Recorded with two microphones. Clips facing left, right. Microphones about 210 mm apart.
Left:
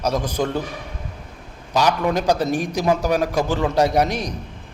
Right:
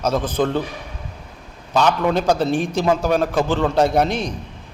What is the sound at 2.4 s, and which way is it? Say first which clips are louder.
Speech: right 2 dB; 30° right (ahead or behind).